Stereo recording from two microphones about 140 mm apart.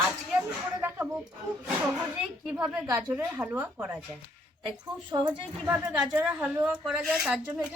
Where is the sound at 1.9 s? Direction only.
10° right (ahead or behind).